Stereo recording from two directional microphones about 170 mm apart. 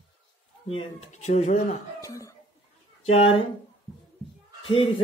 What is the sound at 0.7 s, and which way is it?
Speech, 35° left (ahead or behind).